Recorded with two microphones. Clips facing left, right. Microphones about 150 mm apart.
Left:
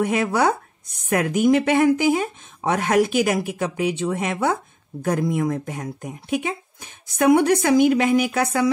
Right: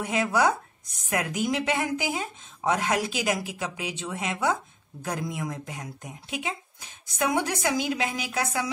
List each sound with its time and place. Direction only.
0.0 s speech: 55° left (ahead or behind)